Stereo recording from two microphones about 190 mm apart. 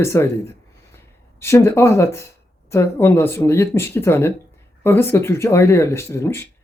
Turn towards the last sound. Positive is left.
turn(degrees=15)  # may be behind; listen again after turning